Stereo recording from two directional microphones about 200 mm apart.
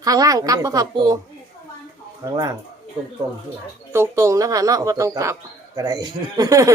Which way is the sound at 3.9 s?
15° right (ahead or behind).